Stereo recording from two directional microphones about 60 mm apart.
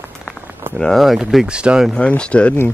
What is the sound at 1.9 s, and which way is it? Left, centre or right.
Speech, centre.